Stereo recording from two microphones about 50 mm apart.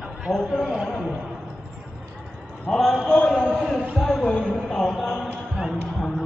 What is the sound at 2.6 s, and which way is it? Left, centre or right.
A man's voice, centre.